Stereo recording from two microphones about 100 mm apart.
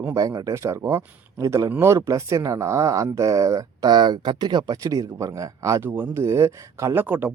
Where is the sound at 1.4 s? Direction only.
35° right (ahead or behind).